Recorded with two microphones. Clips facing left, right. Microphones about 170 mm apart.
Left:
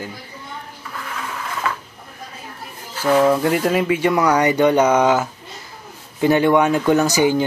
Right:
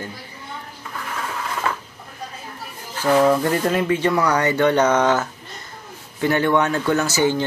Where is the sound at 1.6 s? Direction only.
30° right (ahead or behind).